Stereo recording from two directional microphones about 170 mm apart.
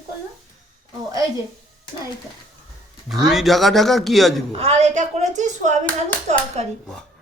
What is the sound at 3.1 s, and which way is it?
Speech, centre (ahead or behind).